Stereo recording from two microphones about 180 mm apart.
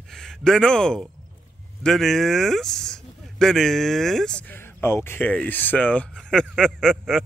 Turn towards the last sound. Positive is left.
turn(degrees=0)  # may be behind; listen again after turning